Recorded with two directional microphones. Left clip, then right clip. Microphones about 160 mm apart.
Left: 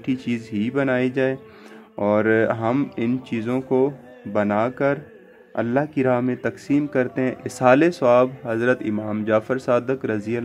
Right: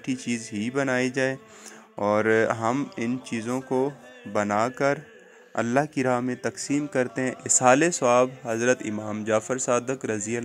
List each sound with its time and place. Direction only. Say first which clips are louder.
0.5 s speech: left 4 dB; 25° right (ahead or behind)